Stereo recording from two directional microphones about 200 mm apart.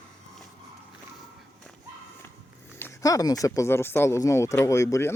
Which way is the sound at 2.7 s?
15° left (ahead or behind).